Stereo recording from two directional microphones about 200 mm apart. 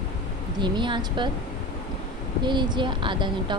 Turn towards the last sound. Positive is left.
turn(degrees=-25)  # may be behind; listen again after turning